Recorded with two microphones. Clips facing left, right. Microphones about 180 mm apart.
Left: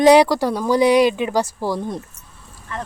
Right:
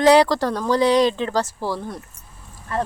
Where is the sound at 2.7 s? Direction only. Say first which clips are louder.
Right 6 dB; 35° right (ahead or behind).